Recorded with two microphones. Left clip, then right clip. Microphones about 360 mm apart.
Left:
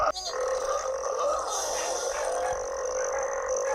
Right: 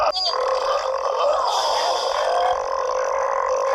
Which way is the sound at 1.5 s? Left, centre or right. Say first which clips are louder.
Right 10 dB; centre.